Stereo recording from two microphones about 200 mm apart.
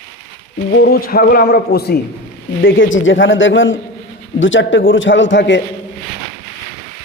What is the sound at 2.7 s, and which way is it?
Speech, 70° left (ahead or behind).